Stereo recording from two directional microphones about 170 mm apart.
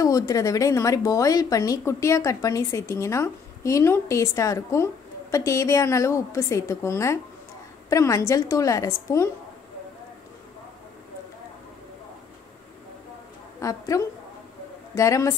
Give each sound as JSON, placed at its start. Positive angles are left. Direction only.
{"t": 0.0, "sound": "a woman's voice", "side_deg": 20}
{"t": 13.6, "sound": "a woman's voice", "side_deg": 20}